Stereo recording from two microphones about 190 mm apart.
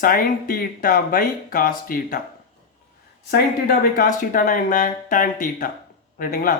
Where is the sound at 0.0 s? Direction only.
50° left (ahead or behind).